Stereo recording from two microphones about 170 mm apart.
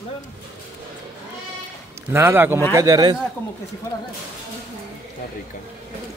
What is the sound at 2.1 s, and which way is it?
A man's voice, 15° right (ahead or behind).